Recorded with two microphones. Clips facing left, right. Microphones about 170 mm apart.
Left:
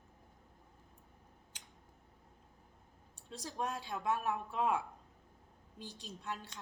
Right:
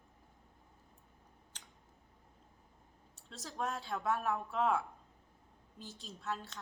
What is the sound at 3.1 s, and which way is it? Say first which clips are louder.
A woman's voice: left 1 dB; 15° left (ahead or behind).